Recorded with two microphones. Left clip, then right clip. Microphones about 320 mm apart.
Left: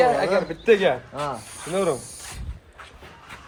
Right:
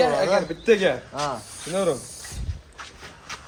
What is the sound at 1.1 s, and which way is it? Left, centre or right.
Speech, centre.